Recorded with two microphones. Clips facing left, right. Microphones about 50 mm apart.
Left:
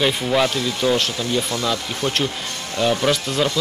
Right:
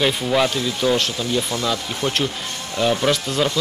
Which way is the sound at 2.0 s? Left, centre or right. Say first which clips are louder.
Even; centre.